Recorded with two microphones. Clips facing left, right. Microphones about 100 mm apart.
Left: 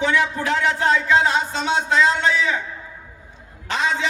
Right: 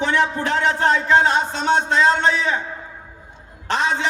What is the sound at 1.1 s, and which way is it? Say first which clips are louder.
A man's voice: right 2 dB; 45° right (ahead or behind).